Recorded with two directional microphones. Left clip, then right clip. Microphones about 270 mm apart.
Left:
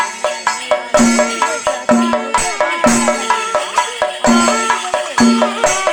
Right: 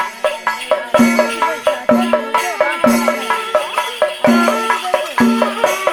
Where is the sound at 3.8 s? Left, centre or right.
Left.